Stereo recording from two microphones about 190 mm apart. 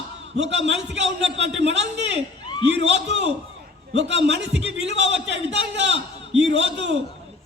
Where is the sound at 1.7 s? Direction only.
65° right (ahead or behind).